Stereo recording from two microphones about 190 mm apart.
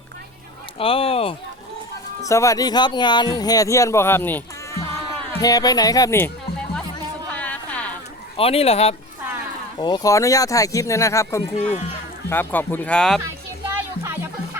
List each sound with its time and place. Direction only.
0.8 s speech: 30° left (ahead or behind)
2.2 s speech: 15° left (ahead or behind)
7.3 s a sound: 10° left (ahead or behind)
8.4 s speech: 30° left (ahead or behind)
9.7 s speech: 20° left (ahead or behind)
11.5 s speech: 35° left (ahead or behind)
12.3 s speech: 10° left (ahead or behind)